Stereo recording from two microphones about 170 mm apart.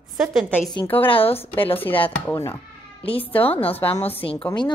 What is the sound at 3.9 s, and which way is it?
Speech, 35° left (ahead or behind).